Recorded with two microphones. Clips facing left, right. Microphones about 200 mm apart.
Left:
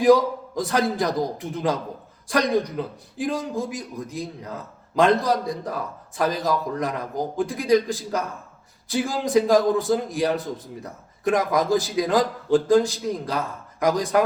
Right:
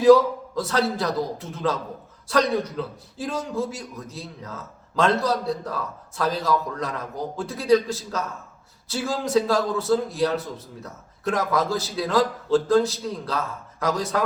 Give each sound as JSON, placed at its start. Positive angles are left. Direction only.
{"t": 0.0, "sound": "a man's voice", "side_deg": 15}